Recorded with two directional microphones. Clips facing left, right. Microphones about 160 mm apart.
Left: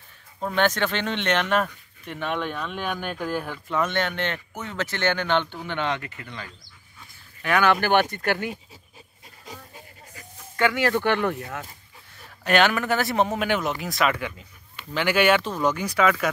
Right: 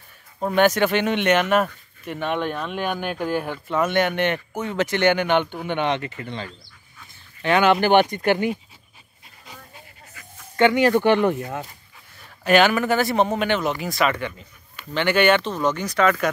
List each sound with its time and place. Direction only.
0.4 s speech: 15° right (ahead or behind)
10.5 s speech: 20° right (ahead or behind)
12.4 s speech: centre (ahead or behind)